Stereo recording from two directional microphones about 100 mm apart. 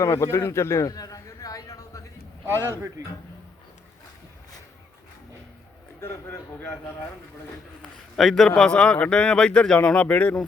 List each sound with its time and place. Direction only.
0.0 s a sound: 30° left (ahead or behind)
2.5 s speech: 25° right (ahead or behind)
6.0 s a man's voice: 25° left (ahead or behind)
8.1 s a man's voice: centre (ahead or behind)